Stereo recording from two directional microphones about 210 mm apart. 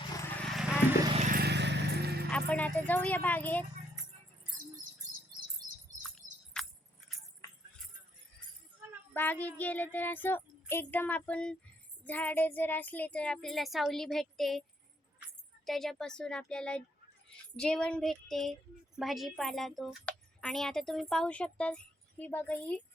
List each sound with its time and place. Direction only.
0.1 s horse: 15° left (ahead or behind)
0.4 s horse: centre (ahead or behind)
1.1 s vehicle: 35° right (ahead or behind)
1.4 s vehicle: 55° right (ahead or behind)
2.5 s child singing: 5° left (ahead or behind)
5.6 s bird: 20° right (ahead or behind)
6.5 s keys jangling: 5° left (ahead or behind)
9.1 s child singing: 10° left (ahead or behind)
12.0 s a woman's voice: 10° left (ahead or behind)
15.6 s a woman's voice: centre (ahead or behind)